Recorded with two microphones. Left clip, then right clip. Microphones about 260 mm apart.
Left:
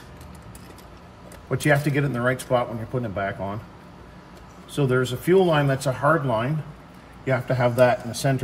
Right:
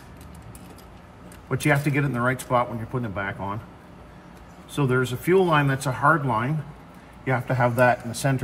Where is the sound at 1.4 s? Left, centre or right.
Centre.